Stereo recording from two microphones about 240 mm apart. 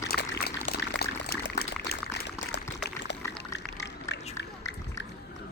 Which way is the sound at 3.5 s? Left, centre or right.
Left.